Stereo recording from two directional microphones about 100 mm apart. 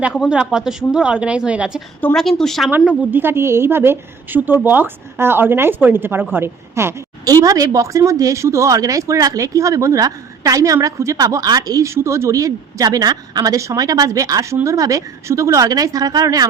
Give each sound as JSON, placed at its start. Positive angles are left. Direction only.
{"t": 0.0, "sound": "a woman's voice", "side_deg": -5}
{"t": 2.0, "sound": "a woman's voice", "side_deg": 15}
{"t": 2.4, "sound": "speech", "side_deg": 5}
{"t": 2.6, "sound": "a woman's voice", "side_deg": -15}
{"t": 7.4, "sound": "a woman's voice", "side_deg": -35}